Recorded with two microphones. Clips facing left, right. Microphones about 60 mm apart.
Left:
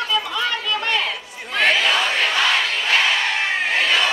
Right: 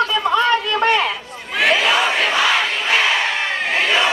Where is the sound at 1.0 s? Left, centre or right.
Centre.